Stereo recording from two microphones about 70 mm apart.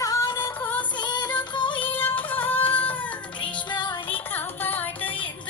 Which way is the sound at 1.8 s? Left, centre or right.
Left.